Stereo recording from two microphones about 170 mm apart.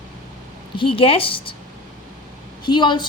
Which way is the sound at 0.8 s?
30° left (ahead or behind).